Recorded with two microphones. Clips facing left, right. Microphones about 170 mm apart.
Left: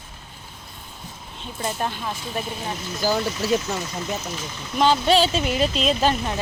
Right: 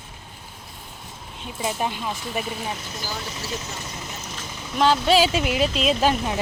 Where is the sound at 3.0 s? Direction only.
90° left.